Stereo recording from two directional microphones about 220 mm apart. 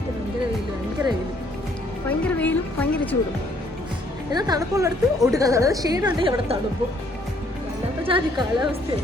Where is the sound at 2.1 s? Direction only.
5° left (ahead or behind).